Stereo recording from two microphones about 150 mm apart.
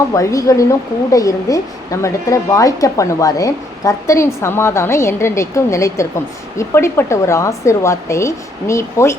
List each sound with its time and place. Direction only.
0.1 s a woman's voice: 20° left (ahead or behind)